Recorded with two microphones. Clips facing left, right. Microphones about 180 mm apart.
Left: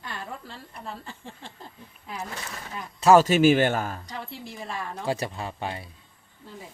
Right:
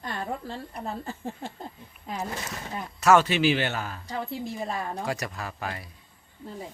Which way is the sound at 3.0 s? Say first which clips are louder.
Left 4 dB; 35° left (ahead or behind).